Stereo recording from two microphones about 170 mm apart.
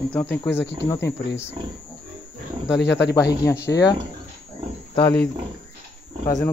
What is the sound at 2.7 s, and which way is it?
Speech, 90° left.